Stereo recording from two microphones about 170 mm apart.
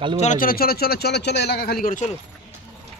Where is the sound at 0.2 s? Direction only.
50° left (ahead or behind).